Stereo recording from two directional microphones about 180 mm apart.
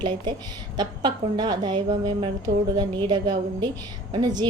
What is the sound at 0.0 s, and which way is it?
A woman's voice, 25° right (ahead or behind).